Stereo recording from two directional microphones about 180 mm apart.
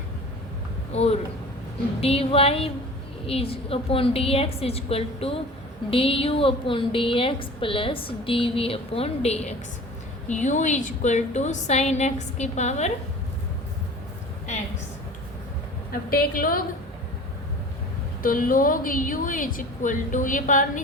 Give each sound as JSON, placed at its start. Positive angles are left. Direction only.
{"t": 0.9, "sound": "a woman's voice", "side_deg": 35}
{"t": 15.9, "sound": "a woman's voice", "side_deg": 55}
{"t": 18.2, "sound": "a woman's voice", "side_deg": 50}